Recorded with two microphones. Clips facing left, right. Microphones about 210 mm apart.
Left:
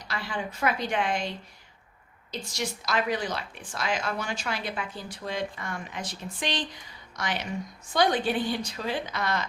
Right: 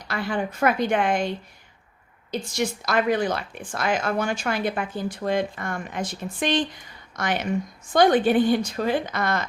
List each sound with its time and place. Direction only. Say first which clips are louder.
0.1 s a woman's voice: right 7 dB; 55° right (ahead or behind)
2.5 s a woman's voice: right 5 dB; 55° right (ahead or behind)